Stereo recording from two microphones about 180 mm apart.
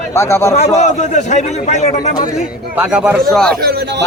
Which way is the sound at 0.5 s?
35° left (ahead or behind).